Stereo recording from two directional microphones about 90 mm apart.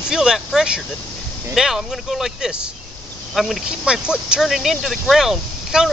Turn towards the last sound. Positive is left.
turn(degrees=-5)  # may be behind; listen again after turning